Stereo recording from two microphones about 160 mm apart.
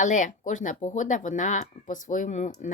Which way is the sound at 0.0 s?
50° left (ahead or behind).